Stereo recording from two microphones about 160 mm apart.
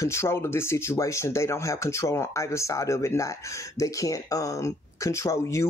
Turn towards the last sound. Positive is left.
turn(degrees=20)  # may be behind; listen again after turning